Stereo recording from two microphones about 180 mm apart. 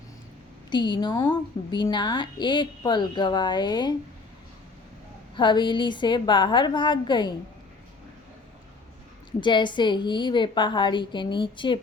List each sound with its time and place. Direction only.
0.7 s a woman's voice: 25° left (ahead or behind)
5.4 s a woman's voice: 25° left (ahead or behind)
9.4 s a woman's voice: 25° left (ahead or behind)